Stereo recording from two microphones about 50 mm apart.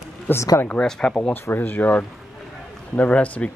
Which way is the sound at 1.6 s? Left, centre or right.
Left.